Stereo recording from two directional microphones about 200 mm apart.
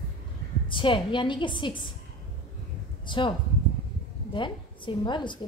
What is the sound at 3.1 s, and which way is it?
A woman's voice, 25° left (ahead or behind).